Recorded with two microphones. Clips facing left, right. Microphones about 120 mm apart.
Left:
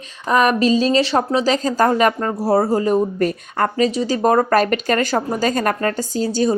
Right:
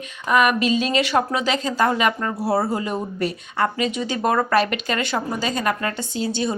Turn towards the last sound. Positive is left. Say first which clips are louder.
# left 5 dB
turn(degrees=40)  # may be behind; listen again after turning